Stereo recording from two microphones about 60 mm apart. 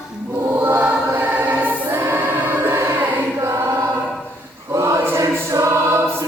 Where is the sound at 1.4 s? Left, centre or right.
Right.